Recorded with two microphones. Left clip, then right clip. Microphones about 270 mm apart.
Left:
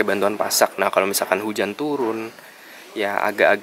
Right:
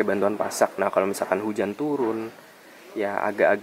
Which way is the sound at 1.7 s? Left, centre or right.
Right.